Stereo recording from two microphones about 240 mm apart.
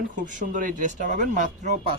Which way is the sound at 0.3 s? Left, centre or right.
Right.